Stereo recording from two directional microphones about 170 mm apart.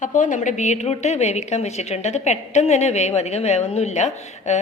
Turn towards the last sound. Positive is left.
turn(degrees=45)  # may be behind; listen again after turning